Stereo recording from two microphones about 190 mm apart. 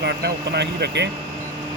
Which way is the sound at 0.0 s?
60° right (ahead or behind).